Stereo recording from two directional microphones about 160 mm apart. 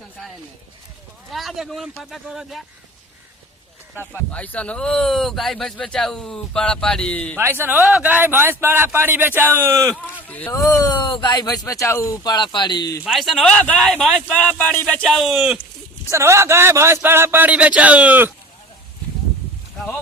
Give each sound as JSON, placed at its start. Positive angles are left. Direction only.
{"t": 1.3, "sound": "speech", "side_deg": 0}
{"t": 4.1, "sound": "speech", "side_deg": 10}
{"t": 7.3, "sound": "a man's voice", "side_deg": -15}
{"t": 10.2, "sound": "speech", "side_deg": 10}
{"t": 10.5, "sound": "speech", "side_deg": 20}
{"t": 13.1, "sound": "speech", "side_deg": 0}
{"t": 16.0, "sound": "a man's voice", "side_deg": -15}